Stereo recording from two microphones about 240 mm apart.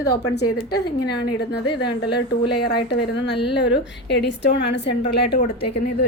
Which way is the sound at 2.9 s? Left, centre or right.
Left.